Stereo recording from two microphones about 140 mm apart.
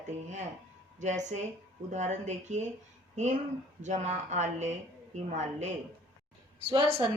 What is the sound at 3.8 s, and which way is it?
Speech, 60° right (ahead or behind).